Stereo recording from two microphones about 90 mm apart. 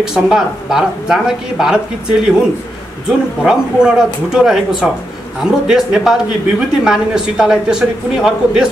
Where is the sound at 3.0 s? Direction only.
5° right (ahead or behind).